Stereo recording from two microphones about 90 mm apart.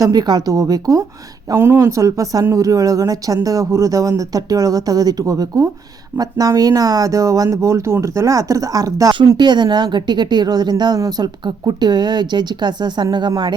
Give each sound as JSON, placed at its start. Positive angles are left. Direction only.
{"t": 0.0, "sound": "a woman's voice", "side_deg": -45}
{"t": 1.5, "sound": "a woman's voice", "side_deg": -30}